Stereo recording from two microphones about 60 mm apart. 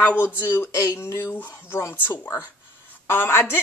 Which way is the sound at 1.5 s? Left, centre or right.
Left.